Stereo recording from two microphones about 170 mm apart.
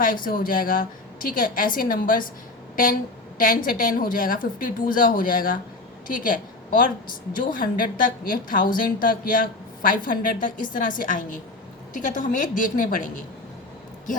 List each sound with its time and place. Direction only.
0.0 s a woman's voice: 55° left (ahead or behind)
3.3 s a woman's voice: 55° left (ahead or behind)